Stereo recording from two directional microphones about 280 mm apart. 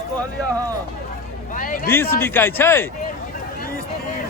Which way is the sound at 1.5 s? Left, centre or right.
Left.